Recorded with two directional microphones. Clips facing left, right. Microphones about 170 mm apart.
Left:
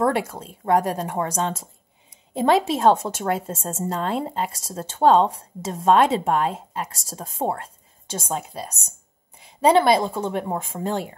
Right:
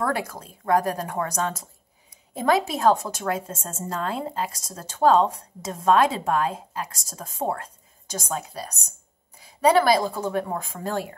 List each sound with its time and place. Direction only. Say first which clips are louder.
0.0 s a woman's voice: left 5 dB; 25° left (ahead or behind)